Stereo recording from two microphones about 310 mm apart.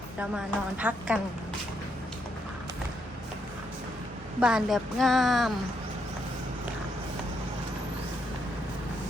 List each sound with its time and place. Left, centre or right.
0.2 s a woman's voice: centre
4.4 s a woman's voice: centre